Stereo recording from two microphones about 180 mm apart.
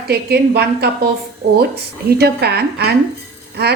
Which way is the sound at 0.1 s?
65° right (ahead or behind).